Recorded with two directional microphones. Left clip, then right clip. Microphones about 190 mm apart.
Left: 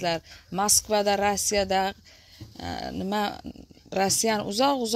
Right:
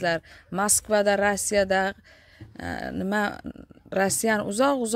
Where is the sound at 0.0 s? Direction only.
25° right (ahead or behind).